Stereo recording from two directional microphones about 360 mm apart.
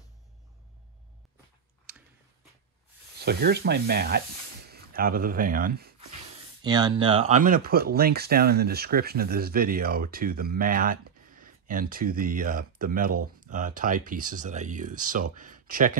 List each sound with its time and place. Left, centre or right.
3.3 s speech: right
6.6 s speech: centre